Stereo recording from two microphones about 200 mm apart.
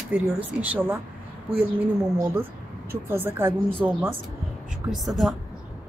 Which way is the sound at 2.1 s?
10° right (ahead or behind).